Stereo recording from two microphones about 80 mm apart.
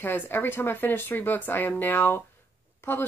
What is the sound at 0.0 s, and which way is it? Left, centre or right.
Speech, left.